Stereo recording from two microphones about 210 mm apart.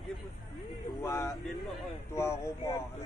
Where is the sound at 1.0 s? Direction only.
15° left (ahead or behind).